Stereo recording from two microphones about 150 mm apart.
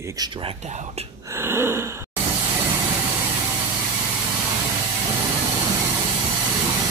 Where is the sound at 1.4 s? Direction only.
15° right (ahead or behind).